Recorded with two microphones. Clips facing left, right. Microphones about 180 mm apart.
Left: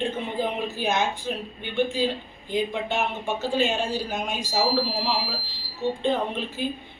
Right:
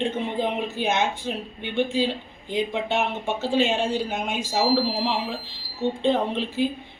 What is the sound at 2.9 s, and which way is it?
Speech, 25° right (ahead or behind).